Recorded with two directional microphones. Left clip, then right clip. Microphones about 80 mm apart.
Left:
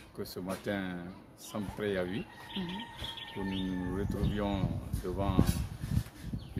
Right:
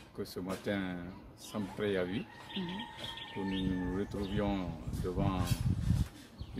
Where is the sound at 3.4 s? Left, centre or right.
Left.